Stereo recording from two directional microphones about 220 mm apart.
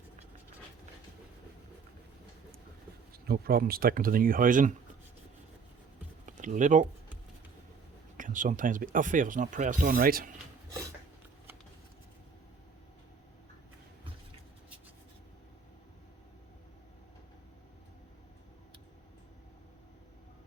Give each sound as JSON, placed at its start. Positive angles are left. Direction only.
{"t": 3.1, "sound": "speech", "side_deg": -45}
{"t": 6.2, "sound": "a sound", "side_deg": -35}
{"t": 8.1, "sound": "speech", "side_deg": -35}